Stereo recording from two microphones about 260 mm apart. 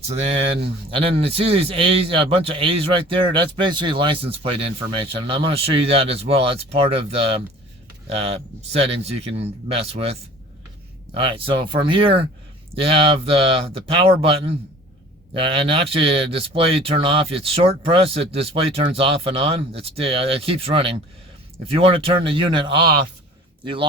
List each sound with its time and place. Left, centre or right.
0.1 s speech: right